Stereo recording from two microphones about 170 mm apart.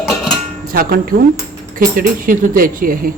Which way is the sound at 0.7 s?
60° right (ahead or behind).